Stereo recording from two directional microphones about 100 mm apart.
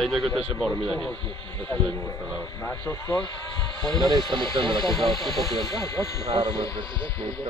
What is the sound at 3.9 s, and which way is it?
Speech, 45° right (ahead or behind).